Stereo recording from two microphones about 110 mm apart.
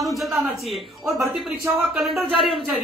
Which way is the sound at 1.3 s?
Centre (ahead or behind).